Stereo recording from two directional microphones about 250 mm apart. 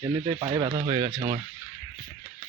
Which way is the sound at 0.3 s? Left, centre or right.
Centre.